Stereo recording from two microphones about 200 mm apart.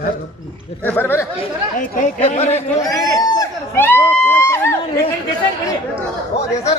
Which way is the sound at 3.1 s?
15° left (ahead or behind).